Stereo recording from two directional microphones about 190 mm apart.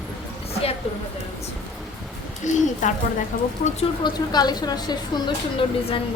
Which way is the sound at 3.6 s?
30° left (ahead or behind).